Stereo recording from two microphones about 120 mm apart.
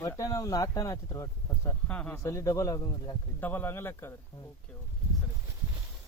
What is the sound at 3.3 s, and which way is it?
Speech, 15° left (ahead or behind).